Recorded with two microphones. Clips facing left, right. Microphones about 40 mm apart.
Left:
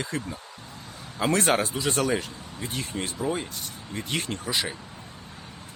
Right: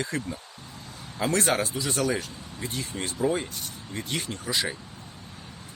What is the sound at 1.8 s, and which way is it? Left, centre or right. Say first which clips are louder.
Speech: left 3 dB; left.